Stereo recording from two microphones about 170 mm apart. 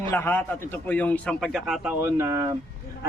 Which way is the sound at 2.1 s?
15° right (ahead or behind).